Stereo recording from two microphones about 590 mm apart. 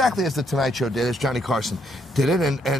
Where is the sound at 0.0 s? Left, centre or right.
Centre.